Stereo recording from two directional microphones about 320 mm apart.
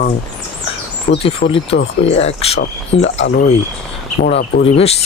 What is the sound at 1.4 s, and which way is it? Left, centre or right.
Speech, left.